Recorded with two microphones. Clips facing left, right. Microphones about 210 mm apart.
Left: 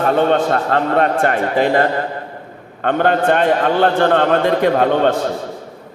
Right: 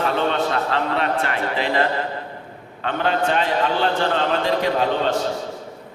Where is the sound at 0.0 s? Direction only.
50° left (ahead or behind).